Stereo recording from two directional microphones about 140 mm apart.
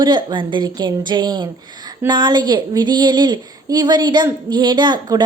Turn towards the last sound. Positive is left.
turn(degrees=-30)  # may be behind; listen again after turning